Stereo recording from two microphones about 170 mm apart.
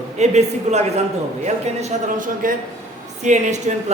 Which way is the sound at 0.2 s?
40° right (ahead or behind).